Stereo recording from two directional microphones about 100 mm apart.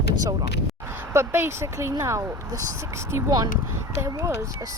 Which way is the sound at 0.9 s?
25° right (ahead or behind).